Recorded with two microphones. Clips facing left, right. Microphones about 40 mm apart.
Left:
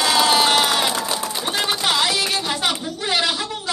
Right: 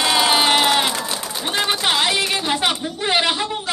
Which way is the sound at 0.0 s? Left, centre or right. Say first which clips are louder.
Even; centre.